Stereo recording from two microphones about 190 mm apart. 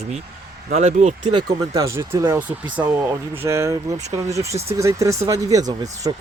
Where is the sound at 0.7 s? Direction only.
35° right (ahead or behind).